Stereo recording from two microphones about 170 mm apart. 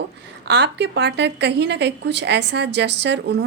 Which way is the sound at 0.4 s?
90° right.